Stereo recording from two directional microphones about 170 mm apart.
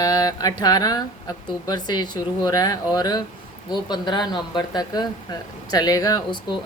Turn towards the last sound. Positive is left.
turn(degrees=25)  # may be behind; listen again after turning